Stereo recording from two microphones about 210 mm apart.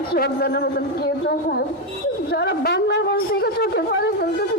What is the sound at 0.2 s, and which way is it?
A man's voice, 50° left (ahead or behind).